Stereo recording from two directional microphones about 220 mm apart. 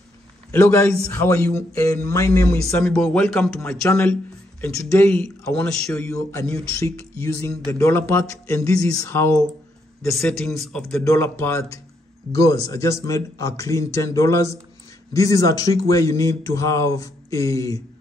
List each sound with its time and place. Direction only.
0.5 s speech: 10° left (ahead or behind)
6.1 s speech: 15° left (ahead or behind)